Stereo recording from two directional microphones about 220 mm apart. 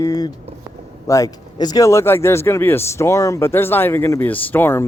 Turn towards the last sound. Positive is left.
turn(degrees=10)  # may be behind; listen again after turning